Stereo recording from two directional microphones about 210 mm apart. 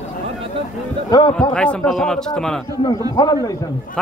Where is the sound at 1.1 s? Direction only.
20° left (ahead or behind).